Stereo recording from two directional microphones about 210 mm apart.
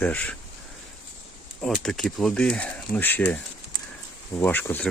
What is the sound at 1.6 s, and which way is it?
Speech, centre (ahead or behind).